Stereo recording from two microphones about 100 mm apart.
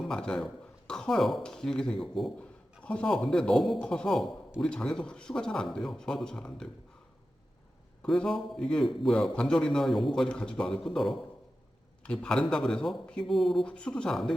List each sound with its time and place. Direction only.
0.0 s a man's voice: 5° left (ahead or behind)
8.0 s a man's voice: 5° left (ahead or behind)